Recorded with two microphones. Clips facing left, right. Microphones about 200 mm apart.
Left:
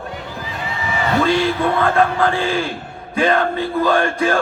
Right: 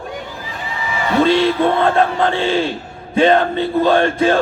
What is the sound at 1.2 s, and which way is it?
Music, 25° right (ahead or behind).